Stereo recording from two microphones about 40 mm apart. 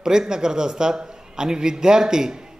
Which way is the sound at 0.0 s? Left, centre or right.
Centre.